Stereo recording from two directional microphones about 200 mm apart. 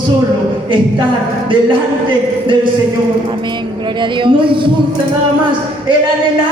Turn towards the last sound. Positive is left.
turn(degrees=-25)  # may be behind; listen again after turning